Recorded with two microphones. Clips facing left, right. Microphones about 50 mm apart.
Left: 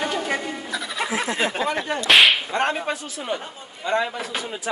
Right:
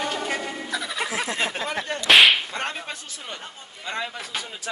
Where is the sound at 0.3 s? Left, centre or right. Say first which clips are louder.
Left 2 dB; centre.